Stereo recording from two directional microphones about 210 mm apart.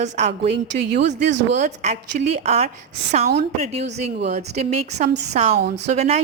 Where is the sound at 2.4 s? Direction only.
30° right (ahead or behind).